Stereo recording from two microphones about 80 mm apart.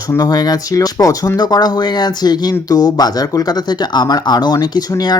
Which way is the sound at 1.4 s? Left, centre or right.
Left.